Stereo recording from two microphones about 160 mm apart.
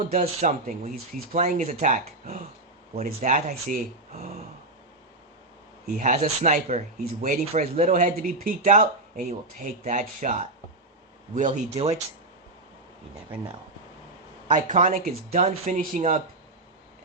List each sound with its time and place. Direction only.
0.1 s speech: 55° right (ahead or behind)
6.0 s speech: 55° right (ahead or behind)
7.0 s speech: 65° right (ahead or behind)
7.5 s speech: 45° right (ahead or behind)
14.5 s speech: 50° right (ahead or behind)